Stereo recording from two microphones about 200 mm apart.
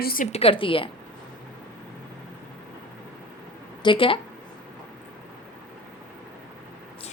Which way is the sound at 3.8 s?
25° left (ahead or behind).